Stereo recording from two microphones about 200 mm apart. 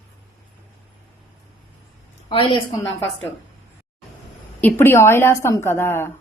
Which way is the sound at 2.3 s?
25° left (ahead or behind).